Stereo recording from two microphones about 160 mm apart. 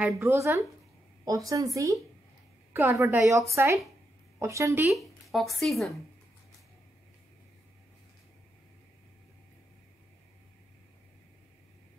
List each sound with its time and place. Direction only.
0.2 s a woman's voice: 15° right (ahead or behind)
4.9 s speech: centre (ahead or behind)